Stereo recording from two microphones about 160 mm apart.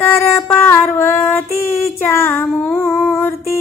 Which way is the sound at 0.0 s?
15° left (ahead or behind).